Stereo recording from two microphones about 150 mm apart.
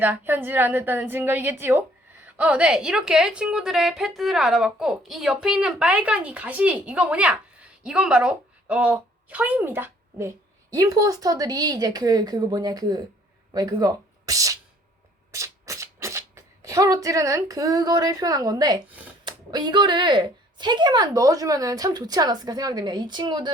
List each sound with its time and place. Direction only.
0.0 s a woman's voice: 15° right (ahead or behind)
18.9 s speech: 10° right (ahead or behind)
19.2 s speech: 30° right (ahead or behind)